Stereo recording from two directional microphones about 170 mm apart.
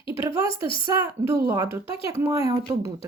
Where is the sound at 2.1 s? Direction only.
15° right (ahead or behind).